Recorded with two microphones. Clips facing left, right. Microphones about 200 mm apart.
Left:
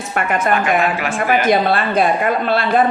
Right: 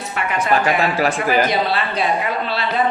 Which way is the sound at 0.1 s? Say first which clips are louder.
Left 5 dB; 50° left (ahead or behind).